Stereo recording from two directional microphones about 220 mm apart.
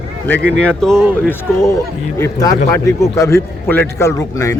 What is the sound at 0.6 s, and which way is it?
Speech, 5° left (ahead or behind).